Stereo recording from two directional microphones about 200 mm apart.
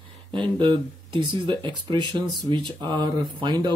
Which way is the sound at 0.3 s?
25° right (ahead or behind).